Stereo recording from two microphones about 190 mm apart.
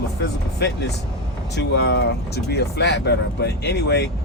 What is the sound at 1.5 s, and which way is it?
Speech, 60° left (ahead or behind).